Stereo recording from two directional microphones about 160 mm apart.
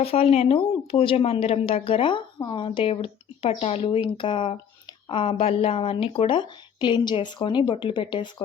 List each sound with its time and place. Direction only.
0.0 s speech: 35° left (ahead or behind)